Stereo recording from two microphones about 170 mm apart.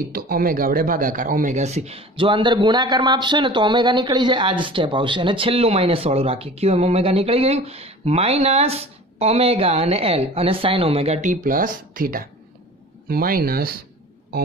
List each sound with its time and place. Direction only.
0.1 s speech: 60° right (ahead or behind)